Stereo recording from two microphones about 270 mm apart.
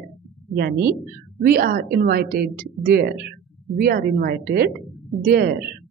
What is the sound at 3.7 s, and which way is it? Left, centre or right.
Speech, right.